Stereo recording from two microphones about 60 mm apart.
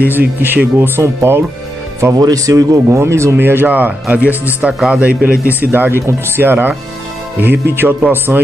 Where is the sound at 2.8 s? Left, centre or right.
Right.